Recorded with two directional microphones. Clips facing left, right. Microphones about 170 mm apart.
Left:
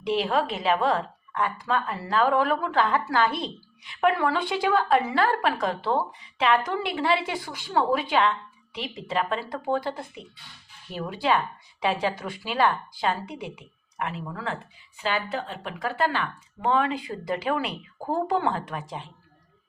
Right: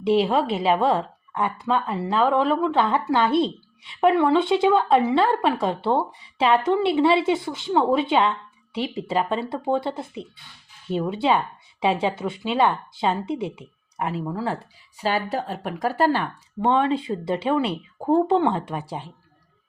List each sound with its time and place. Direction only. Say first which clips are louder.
0.0 s speech: right 5 dB; 30° right (ahead or behind)